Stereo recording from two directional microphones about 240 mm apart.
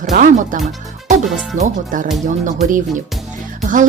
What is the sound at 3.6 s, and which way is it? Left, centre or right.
Music, right.